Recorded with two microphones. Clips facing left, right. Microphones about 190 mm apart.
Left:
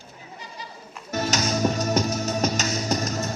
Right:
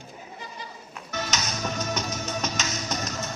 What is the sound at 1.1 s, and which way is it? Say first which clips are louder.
Music: left 7 dB; 40° left (ahead or behind).